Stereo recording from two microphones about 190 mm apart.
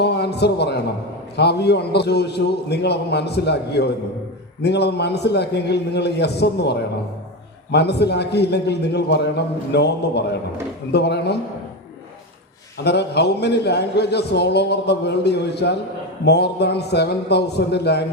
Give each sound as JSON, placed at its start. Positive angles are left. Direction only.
{"t": 0.0, "sound": "a sound", "side_deg": 60}
{"t": 1.4, "sound": "a man's voice", "side_deg": 60}
{"t": 12.8, "sound": "a man's voice", "side_deg": 60}